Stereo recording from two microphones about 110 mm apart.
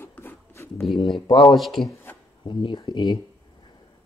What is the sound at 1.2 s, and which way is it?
Speech, 45° left (ahead or behind).